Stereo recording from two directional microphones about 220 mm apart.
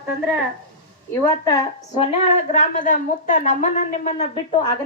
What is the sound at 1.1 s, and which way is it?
Speech, 15° left (ahead or behind).